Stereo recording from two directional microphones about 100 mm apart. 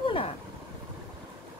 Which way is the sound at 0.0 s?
65° left (ahead or behind).